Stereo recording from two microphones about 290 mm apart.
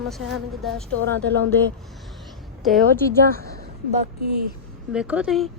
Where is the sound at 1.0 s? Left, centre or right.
Right.